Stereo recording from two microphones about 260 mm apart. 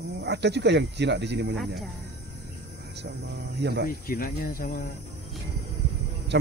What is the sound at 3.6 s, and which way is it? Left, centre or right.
Speech, right.